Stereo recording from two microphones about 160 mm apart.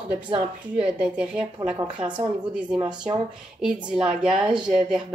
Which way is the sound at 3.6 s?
5° right (ahead or behind).